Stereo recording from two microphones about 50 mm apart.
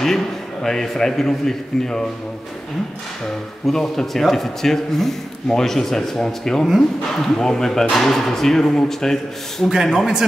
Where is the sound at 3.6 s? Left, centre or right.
Centre.